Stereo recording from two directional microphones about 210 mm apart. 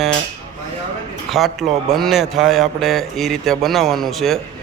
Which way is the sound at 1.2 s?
Centre (ahead or behind).